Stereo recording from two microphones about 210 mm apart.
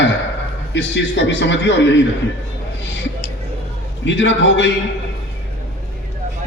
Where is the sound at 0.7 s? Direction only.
60° left (ahead or behind).